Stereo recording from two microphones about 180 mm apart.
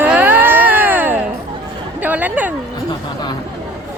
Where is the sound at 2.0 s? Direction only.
10° right (ahead or behind).